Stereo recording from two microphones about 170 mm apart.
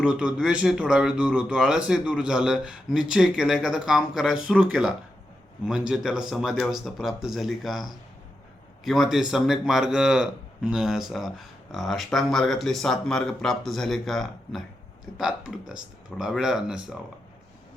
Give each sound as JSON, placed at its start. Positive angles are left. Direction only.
{"t": 0.0, "sound": "a man's voice", "side_deg": -5}